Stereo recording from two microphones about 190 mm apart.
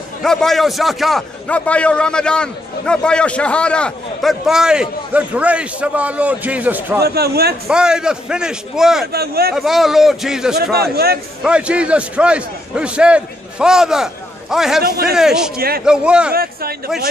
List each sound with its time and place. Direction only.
0.2 s a man's voice: centre (ahead or behind)
7.0 s a man's voice: 55° right (ahead or behind)
7.6 s a man's voice: 5° right (ahead or behind)
9.0 s a man's voice: 55° right (ahead or behind)
9.5 s a man's voice: centre (ahead or behind)
10.7 s a man's voice: 55° right (ahead or behind)
11.4 s a man's voice: 5° right (ahead or behind)
14.8 s speech: 55° right (ahead or behind)
15.1 s a man's voice: 5° right (ahead or behind)
15.5 s speech: 55° right (ahead or behind)
15.8 s a man's voice: 5° right (ahead or behind)
16.3 s a man's voice: 55° right (ahead or behind)